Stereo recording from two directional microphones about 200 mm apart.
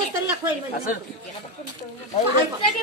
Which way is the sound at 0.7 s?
45° left (ahead or behind).